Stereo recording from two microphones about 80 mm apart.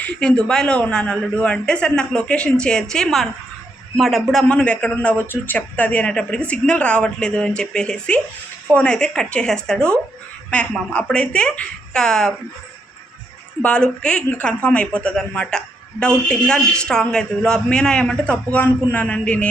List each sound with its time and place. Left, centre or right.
0.0 s a woman's voice: centre
4.4 s a woman's voice: centre
13.6 s a woman's voice: centre